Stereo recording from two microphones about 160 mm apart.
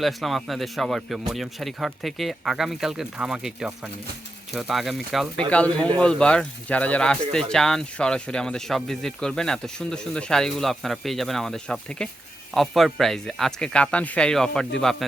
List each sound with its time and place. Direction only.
0.0 s speech: centre (ahead or behind)